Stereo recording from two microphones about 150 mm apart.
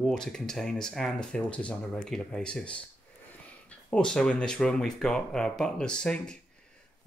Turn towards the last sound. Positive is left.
turn(degrees=5)  # may be behind; listen again after turning